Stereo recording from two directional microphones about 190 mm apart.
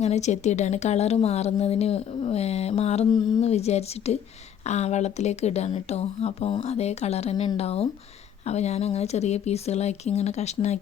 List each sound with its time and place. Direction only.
0.0 s a woman's voice: 35° left (ahead or behind)